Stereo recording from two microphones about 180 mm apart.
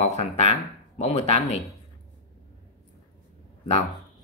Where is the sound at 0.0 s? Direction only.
40° left (ahead or behind).